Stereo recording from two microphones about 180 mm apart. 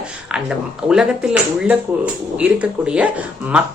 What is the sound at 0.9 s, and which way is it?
Speech, 5° right (ahead or behind).